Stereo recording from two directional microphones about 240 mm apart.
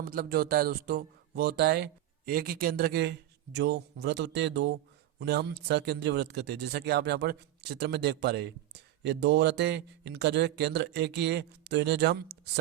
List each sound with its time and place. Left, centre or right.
0.0 s speech: right